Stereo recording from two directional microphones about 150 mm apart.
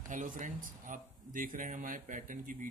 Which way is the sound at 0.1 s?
60° right (ahead or behind).